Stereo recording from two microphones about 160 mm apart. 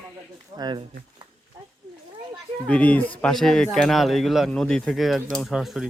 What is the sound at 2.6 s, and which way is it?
Speech, 10° left (ahead or behind).